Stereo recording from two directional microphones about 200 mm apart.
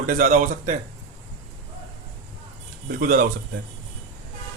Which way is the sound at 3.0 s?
45° right (ahead or behind).